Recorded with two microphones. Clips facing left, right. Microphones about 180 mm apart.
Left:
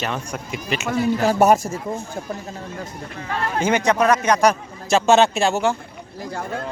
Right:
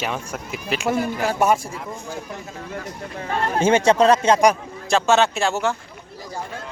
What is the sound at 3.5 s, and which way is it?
Speech, 25° right (ahead or behind).